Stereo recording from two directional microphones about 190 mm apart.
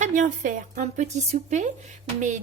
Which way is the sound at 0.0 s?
45° right (ahead or behind).